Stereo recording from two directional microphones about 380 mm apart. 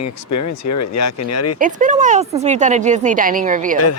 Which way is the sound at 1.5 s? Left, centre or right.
Right.